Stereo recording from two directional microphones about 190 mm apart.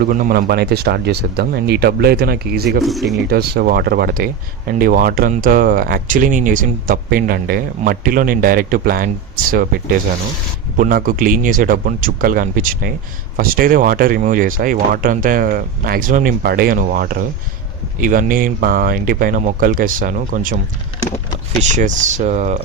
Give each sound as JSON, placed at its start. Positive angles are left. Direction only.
{"t": 0.0, "sound": "speech", "side_deg": -45}
{"t": 2.8, "sound": "speech", "side_deg": 0}
{"t": 3.2, "sound": "speech", "side_deg": -55}
{"t": 21.6, "sound": "speech", "side_deg": -40}